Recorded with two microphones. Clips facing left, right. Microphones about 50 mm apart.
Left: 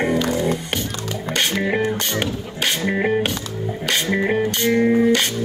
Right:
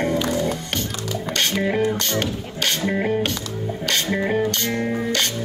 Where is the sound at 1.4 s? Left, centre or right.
Left.